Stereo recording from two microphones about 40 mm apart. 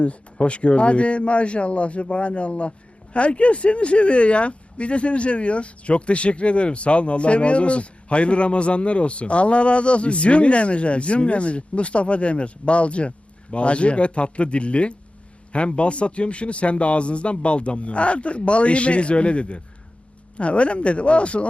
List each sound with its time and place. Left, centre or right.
0.0 s speech: left